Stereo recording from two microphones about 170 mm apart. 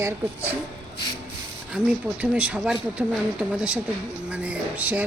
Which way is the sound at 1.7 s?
5° right (ahead or behind).